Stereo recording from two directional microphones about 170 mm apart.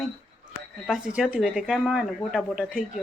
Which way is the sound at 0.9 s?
5° right (ahead or behind).